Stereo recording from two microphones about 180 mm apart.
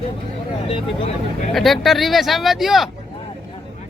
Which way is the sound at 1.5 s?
Centre (ahead or behind).